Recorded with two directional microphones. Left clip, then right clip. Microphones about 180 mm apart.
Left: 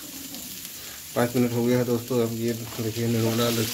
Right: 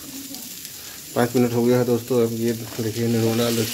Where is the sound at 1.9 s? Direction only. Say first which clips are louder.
Right 5 dB; 15° right (ahead or behind).